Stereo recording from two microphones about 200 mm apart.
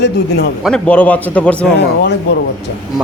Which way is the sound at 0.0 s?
55° left (ahead or behind).